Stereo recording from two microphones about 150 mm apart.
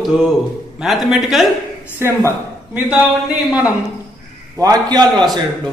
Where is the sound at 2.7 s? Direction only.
10° right (ahead or behind).